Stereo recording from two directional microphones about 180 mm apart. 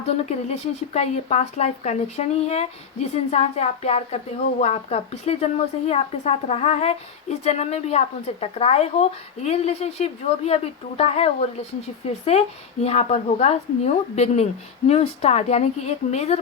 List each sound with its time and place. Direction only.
0.0 s a woman's voice: 35° left (ahead or behind)